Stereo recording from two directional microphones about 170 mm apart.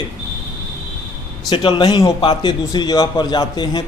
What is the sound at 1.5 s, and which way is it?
A man's voice, 30° left (ahead or behind).